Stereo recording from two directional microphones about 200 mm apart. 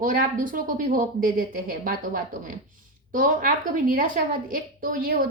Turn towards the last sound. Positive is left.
turn(degrees=-45)  # may be behind; listen again after turning